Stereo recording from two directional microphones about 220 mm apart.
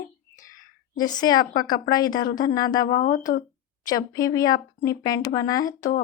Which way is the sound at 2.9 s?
40° left (ahead or behind).